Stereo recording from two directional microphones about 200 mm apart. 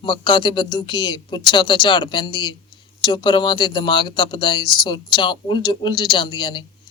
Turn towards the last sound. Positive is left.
turn(degrees=25)  # may be behind; listen again after turning